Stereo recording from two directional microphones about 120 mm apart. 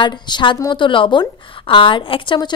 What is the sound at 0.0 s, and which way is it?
A woman's voice, 40° left (ahead or behind).